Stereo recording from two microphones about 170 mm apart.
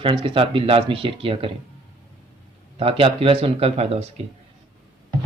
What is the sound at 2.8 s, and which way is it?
Speech, 35° right (ahead or behind).